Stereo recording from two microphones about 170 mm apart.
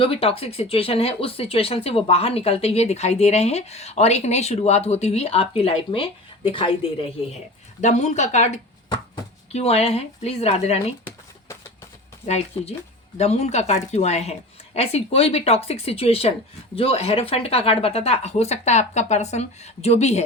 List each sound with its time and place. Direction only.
0.0 s speech: 35° left (ahead or behind)
12.2 s speech: 40° left (ahead or behind)